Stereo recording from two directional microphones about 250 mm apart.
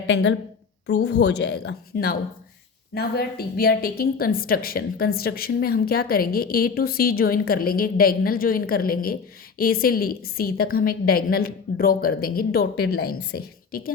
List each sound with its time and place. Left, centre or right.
0.1 s a woman's voice: left